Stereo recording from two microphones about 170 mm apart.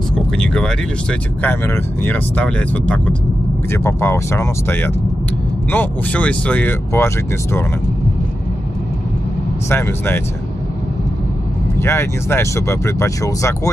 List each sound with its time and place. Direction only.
0.1 s vehicle: 5° left (ahead or behind)
1.4 s speech: 10° left (ahead or behind)
9.7 s speech: 15° left (ahead or behind)
11.8 s speech: 15° left (ahead or behind)